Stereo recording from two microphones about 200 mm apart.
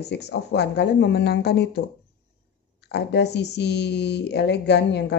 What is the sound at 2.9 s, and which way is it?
Speech, 55° left (ahead or behind).